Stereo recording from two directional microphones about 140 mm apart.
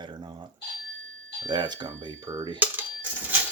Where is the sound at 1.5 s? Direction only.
30° right (ahead or behind).